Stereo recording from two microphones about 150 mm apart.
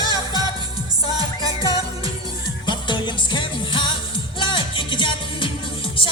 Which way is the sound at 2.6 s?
30° left (ahead or behind).